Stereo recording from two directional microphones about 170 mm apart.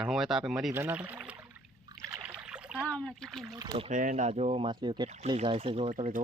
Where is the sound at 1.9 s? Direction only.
25° right (ahead or behind).